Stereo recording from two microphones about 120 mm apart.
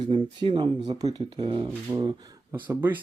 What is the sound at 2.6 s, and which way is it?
Speech, 15° right (ahead or behind).